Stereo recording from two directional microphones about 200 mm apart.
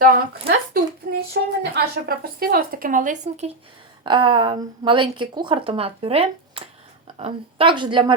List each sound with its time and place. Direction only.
0.0 s speech: 45° right (ahead or behind)
4.0 s a woman's voice: 25° right (ahead or behind)